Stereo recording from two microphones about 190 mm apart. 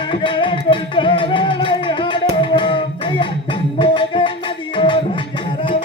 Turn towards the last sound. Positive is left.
turn(degrees=25)  # may be behind; listen again after turning